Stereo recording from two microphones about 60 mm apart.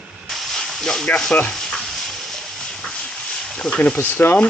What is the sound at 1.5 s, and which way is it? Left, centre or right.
Steam, centre.